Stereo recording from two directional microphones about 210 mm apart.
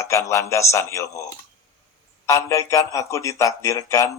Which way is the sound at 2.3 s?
15° left (ahead or behind).